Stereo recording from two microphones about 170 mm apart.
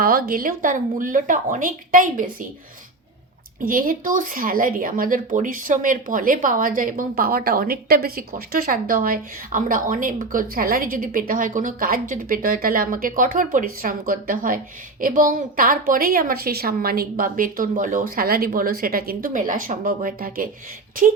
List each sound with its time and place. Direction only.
0.0 s speech: 60° right (ahead or behind)
3.6 s speech: 55° right (ahead or behind)